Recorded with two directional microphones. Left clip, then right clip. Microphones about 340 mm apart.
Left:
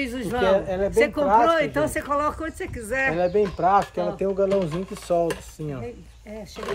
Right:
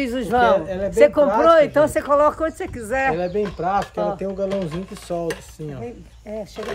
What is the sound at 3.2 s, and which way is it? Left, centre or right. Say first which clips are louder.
Speech: left 2 dB; centre.